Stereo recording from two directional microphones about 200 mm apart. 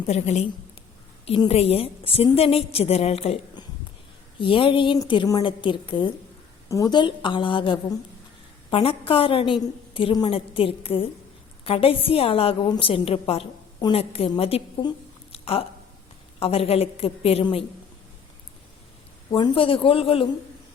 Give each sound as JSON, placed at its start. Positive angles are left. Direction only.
{"t": 0.0, "sound": "a woman's voice", "side_deg": 35}
{"t": 19.3, "sound": "a woman's voice", "side_deg": 25}